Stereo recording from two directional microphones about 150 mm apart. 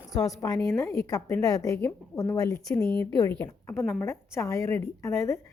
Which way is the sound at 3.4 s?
15° left (ahead or behind).